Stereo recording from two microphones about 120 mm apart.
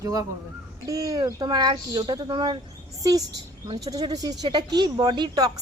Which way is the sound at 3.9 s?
35° right (ahead or behind).